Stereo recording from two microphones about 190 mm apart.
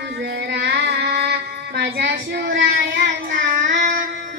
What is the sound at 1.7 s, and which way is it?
Child singing, 65° right (ahead or behind).